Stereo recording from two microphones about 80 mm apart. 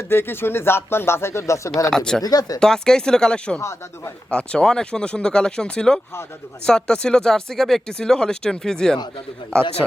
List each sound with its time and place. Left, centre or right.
0.1 s speech: left
1.9 s speech: centre
2.2 s speech: left
2.6 s speech: centre
3.6 s speech: left
4.3 s speech: centre